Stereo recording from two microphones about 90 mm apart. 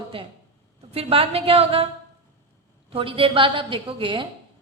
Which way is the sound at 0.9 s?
90° right.